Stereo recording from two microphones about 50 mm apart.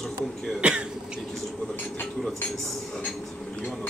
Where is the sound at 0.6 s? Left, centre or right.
Right.